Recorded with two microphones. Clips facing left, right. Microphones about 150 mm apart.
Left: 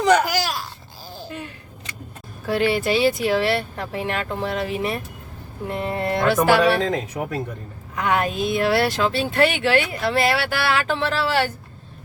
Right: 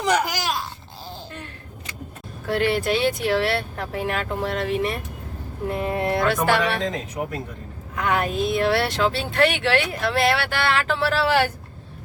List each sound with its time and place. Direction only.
0.3 s babbling: 20° right (ahead or behind)
2.5 s speech: centre (ahead or behind)
7.9 s speech: centre (ahead or behind)